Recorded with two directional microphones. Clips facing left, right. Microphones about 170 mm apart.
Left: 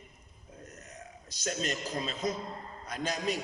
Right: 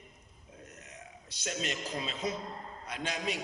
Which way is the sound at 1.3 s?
40° left (ahead or behind).